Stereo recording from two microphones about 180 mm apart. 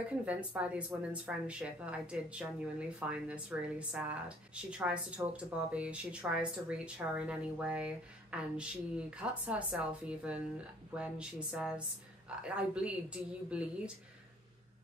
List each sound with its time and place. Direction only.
0.1 s a woman's voice: 10° right (ahead or behind)